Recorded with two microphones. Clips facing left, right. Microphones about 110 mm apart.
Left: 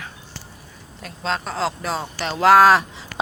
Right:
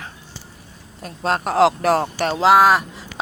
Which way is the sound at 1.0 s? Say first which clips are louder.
Right 4 dB; 50° right (ahead or behind).